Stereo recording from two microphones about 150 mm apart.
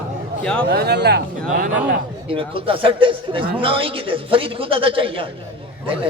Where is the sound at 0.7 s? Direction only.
90° right.